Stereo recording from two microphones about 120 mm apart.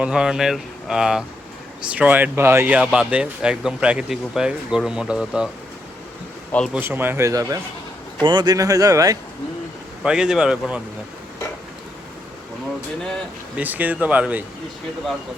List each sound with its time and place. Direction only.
0.0 s speech: 5° right (ahead or behind); by 2.7 s 20° right (ahead or behind)
2.7 s speech: 10° right (ahead or behind)
6.7 s speech: 15° right (ahead or behind)
8.2 s speech: 40° right (ahead or behind)
10.0 s speech: 5° right (ahead or behind)
13.0 s speech: 5° left (ahead or behind)
13.6 s speech: 15° right (ahead or behind)